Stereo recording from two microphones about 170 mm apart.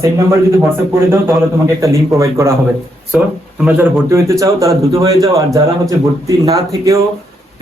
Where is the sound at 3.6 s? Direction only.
10° right (ahead or behind).